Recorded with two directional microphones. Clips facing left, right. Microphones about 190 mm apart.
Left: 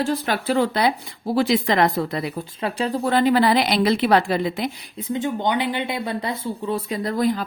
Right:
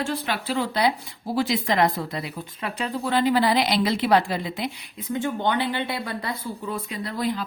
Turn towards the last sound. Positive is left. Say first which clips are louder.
# left 6 dB
turn(degrees=45)  # may be behind; listen again after turning